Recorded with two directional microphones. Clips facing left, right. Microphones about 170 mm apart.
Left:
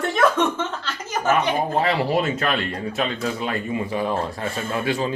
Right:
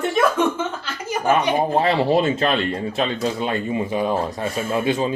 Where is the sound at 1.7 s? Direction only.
25° right (ahead or behind).